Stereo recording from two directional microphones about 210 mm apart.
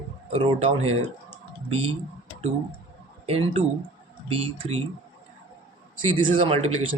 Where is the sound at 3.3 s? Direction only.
30° right (ahead or behind).